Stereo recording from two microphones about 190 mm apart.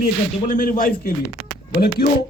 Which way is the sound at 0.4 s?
45° left (ahead or behind).